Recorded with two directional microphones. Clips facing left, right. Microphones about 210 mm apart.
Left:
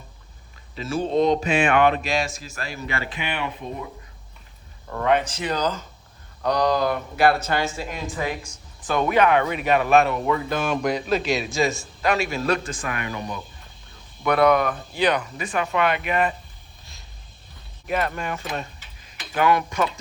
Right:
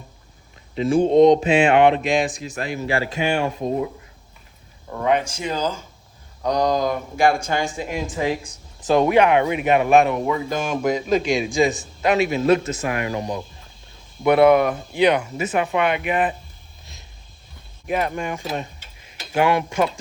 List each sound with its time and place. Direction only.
0.8 s speech: 15° right (ahead or behind)
2.8 s speech: 35° right (ahead or behind)
4.9 s speech: 15° right (ahead or behind)
8.9 s speech: 25° right (ahead or behind)
11.2 s speech: 50° right (ahead or behind)
12.3 s speech: 20° right (ahead or behind)
17.9 s speech: 15° right (ahead or behind)
19.3 s speech: 25° right (ahead or behind)